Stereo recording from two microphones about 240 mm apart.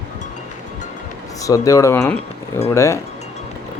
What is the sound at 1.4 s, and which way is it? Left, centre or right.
Speech, centre.